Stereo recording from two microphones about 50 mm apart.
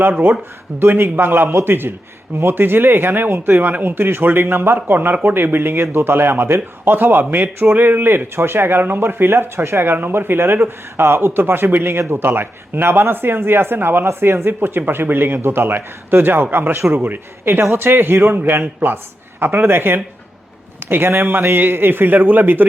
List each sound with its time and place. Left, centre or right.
0.0 s speech: right
0.8 s speech: right
6.1 s speech: right